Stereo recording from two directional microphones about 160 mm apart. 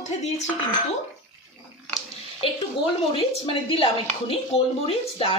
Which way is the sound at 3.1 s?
35° left (ahead or behind).